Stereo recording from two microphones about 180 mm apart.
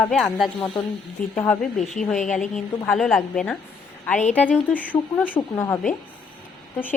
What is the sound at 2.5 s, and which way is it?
A woman's voice, centre (ahead or behind).